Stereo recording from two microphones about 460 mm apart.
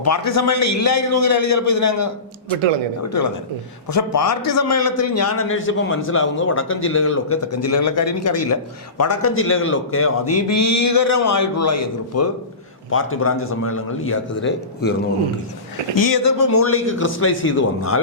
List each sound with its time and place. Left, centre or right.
0.0 s a man's voice: left
16.0 s speech: left
16.5 s a man's voice: left